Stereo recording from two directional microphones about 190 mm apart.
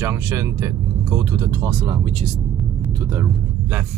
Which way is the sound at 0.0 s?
15° right (ahead or behind).